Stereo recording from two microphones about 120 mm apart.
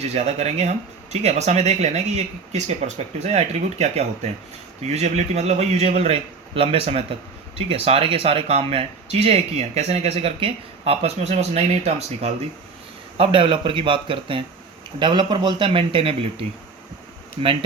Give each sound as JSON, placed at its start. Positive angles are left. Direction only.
{"t": 0.1, "sound": "speech", "side_deg": -65}
{"t": 13.1, "sound": "speech", "side_deg": -45}